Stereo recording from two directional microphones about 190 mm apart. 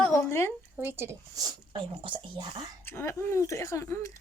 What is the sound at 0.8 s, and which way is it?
Speech, 15° right (ahead or behind).